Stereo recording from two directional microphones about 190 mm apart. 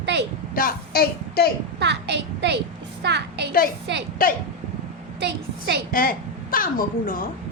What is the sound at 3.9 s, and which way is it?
Speech, 65° right (ahead or behind).